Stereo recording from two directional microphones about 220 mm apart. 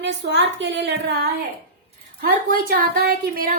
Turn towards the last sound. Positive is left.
turn(degrees=-40)  # may be behind; listen again after turning